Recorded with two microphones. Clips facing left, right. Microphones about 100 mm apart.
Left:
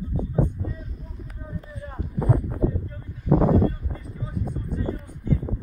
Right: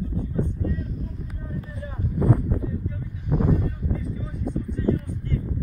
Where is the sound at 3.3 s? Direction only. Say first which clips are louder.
Left 5 dB; 75° left (ahead or behind).